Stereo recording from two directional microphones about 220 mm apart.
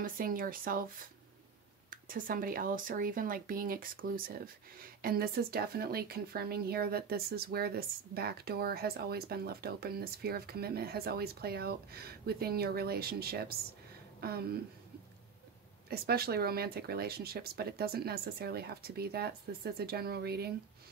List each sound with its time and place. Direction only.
0.0 s speech: 40° right (ahead or behind)
1.9 s speech: 40° right (ahead or behind)
15.9 s speech: 45° right (ahead or behind)